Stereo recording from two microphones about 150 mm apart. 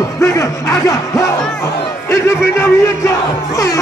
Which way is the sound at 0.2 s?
20° left (ahead or behind).